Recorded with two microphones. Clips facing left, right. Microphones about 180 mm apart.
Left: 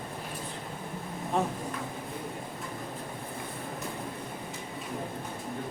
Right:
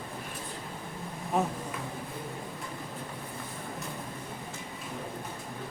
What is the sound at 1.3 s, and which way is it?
Speech, 5° right (ahead or behind).